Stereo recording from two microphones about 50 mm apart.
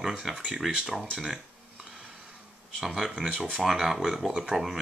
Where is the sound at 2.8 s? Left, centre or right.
Centre.